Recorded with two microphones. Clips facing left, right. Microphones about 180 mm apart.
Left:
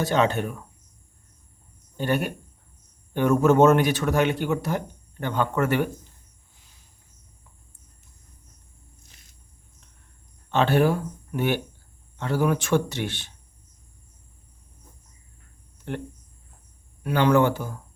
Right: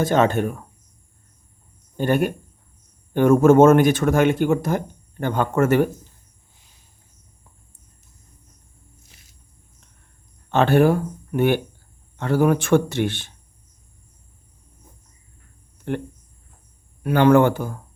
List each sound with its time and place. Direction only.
0.0 s speech: 50° right (ahead or behind)
2.0 s speech: 45° right (ahead or behind)
10.5 s speech: 50° right (ahead or behind)
17.0 s speech: 50° right (ahead or behind)